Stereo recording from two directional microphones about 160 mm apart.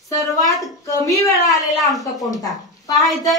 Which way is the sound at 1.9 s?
Centre (ahead or behind).